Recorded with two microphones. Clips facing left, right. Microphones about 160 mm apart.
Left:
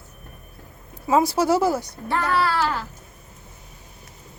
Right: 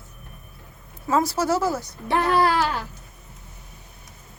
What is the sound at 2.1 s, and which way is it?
Speech, 20° right (ahead or behind).